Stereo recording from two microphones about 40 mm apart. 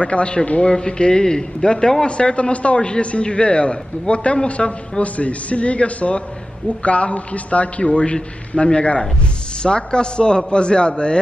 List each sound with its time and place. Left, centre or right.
0.0 s a man's voice: left